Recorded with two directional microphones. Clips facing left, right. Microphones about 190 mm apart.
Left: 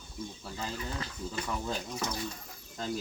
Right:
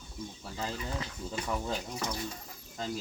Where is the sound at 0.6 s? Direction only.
15° right (ahead or behind).